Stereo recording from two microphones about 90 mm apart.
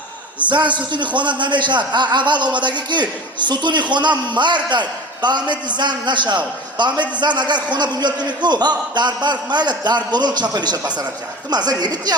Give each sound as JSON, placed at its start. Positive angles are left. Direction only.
{"t": 0.4, "sound": "a man's voice", "side_deg": -60}